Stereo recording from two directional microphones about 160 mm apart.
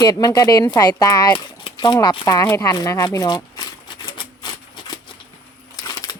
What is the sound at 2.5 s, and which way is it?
Typewriter, 20° left (ahead or behind).